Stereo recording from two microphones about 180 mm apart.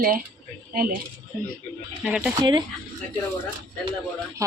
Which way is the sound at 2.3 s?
25° right (ahead or behind).